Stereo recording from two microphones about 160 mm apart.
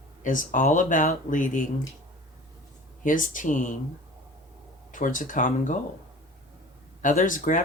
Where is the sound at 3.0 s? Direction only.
55° left (ahead or behind).